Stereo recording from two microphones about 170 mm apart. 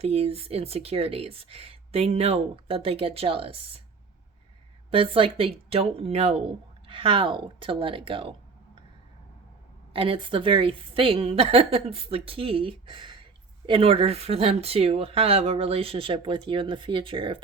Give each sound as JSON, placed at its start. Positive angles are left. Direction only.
{"t": 0.0, "sound": "speech", "side_deg": -35}
{"t": 4.9, "sound": "speech", "side_deg": -35}
{"t": 9.9, "sound": "speech", "side_deg": -30}